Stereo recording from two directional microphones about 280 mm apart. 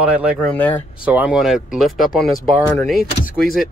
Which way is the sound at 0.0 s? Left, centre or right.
Centre.